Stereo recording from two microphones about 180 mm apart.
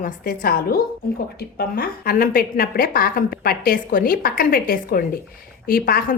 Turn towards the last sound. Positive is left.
turn(degrees=55)  # may be behind; listen again after turning